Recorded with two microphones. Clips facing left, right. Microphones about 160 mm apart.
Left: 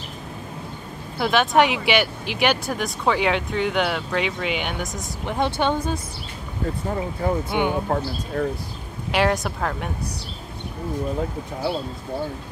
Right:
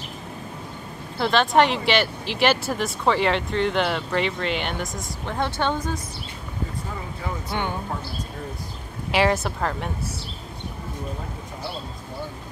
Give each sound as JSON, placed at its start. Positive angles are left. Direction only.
{"t": 1.1, "sound": "speech", "side_deg": 5}
{"t": 5.2, "sound": "speech", "side_deg": 15}
{"t": 7.4, "sound": "speech", "side_deg": 15}
{"t": 8.4, "sound": "speech", "side_deg": 75}
{"t": 9.1, "sound": "speech", "side_deg": -5}